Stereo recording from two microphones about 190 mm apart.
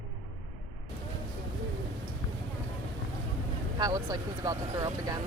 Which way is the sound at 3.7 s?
20° right (ahead or behind).